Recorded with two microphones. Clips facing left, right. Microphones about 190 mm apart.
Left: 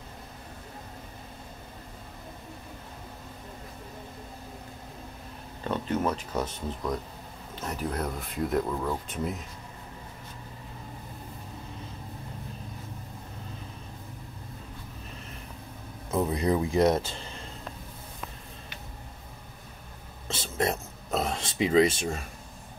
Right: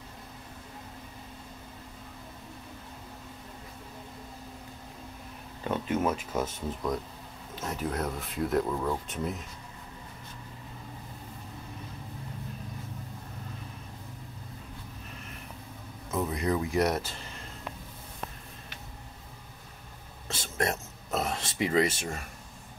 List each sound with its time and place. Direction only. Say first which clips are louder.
5.6 s speech: even; 5° right (ahead or behind)
16.1 s speech: left 3 dB; 30° left (ahead or behind)
20.5 s a sound: left 2 dB; 20° left (ahead or behind)